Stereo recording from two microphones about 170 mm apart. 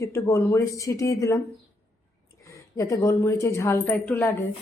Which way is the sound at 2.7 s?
20° left (ahead or behind).